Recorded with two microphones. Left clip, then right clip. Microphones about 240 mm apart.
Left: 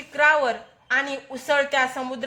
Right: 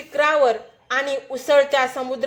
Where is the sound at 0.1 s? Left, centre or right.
Centre.